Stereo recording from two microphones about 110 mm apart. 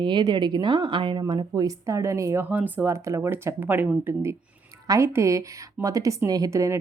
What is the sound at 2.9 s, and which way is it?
A woman's voice, 25° right (ahead or behind).